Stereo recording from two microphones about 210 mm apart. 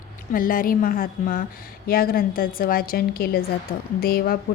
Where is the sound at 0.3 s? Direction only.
40° left (ahead or behind).